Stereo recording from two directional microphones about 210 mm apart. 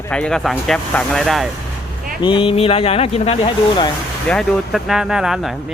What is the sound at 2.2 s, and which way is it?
Speech, 25° left (ahead or behind).